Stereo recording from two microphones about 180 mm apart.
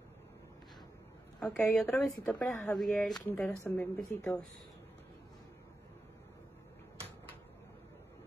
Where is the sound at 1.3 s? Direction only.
5° left (ahead or behind).